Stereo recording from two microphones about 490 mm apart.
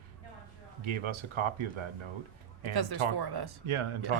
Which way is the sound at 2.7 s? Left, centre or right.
Right.